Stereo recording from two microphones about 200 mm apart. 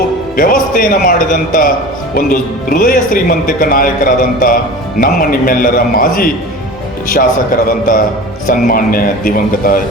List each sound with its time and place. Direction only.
0.3 s speech: 45° left (ahead or behind)